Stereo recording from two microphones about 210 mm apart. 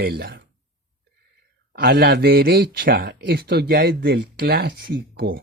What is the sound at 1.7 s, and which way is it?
Speech, 45° right (ahead or behind).